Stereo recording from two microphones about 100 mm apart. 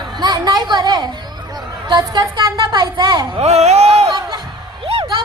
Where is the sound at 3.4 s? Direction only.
90° right.